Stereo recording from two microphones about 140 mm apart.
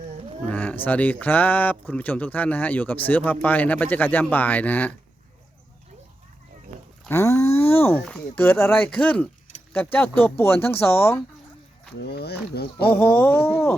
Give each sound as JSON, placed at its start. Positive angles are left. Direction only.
{"t": 0.4, "sound": "speech", "side_deg": 10}
{"t": 7.1, "sound": "speech", "side_deg": 20}
{"t": 12.7, "sound": "speech", "side_deg": 15}